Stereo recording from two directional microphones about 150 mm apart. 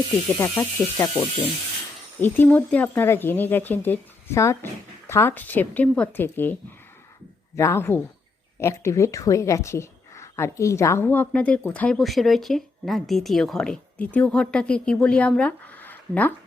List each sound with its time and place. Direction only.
0.3 s speech: 15° left (ahead or behind)